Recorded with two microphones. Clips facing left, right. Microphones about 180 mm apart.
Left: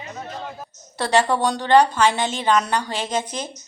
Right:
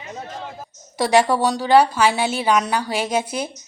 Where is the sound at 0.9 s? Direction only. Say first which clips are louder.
Right 3 dB; 10° right (ahead or behind).